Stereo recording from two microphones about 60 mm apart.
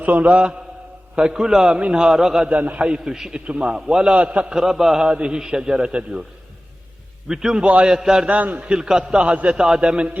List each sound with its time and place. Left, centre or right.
0.0 s a man's voice: right; by 2.5 s centre
2.5 s a man's voice: right
7.3 s a man's voice: centre
8.3 s a man's voice: right
8.7 s a man's voice: centre